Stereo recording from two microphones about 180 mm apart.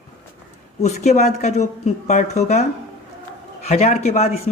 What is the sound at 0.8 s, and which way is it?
Speech, 40° left (ahead or behind).